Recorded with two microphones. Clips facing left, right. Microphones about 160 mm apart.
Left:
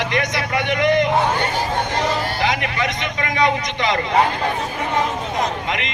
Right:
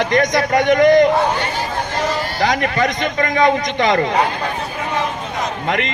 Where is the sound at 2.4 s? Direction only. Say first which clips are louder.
Right 4 dB; 45° right (ahead or behind).